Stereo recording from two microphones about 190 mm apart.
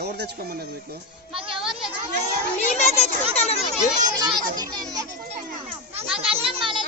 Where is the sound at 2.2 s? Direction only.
35° left (ahead or behind).